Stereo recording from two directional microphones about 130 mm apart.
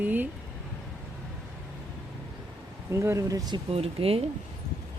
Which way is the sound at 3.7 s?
50° right (ahead or behind).